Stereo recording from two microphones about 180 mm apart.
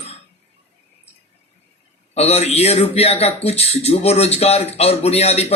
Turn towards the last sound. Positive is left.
turn(degrees=35)  # may be behind; listen again after turning